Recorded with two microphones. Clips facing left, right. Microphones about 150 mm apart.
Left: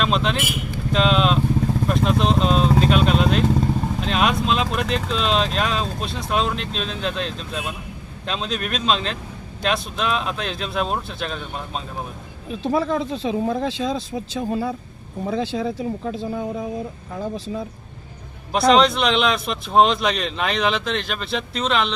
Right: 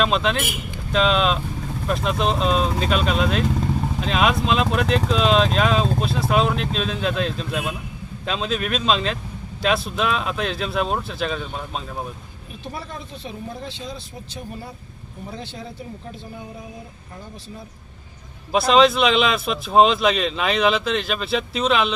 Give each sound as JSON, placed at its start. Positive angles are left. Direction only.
{"t": 0.0, "sound": "a man's voice", "side_deg": 0}
{"t": 12.6, "sound": "speech", "side_deg": 90}
{"t": 18.5, "sound": "a man's voice", "side_deg": -5}